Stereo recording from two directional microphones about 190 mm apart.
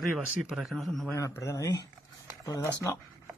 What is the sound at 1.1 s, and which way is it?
Speech, 15° left (ahead or behind).